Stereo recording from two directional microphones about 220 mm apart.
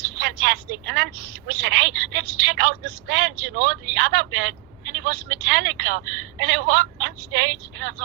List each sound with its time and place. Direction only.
0.2 s a woman's voice: 55° right (ahead or behind)